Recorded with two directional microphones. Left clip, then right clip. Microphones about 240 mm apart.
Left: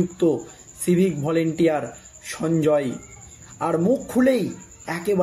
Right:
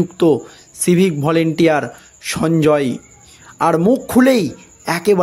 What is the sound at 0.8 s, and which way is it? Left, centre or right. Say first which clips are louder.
A man's voice: right 6 dB; right.